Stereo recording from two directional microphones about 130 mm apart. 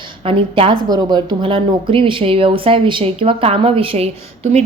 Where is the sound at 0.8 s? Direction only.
35° right (ahead or behind).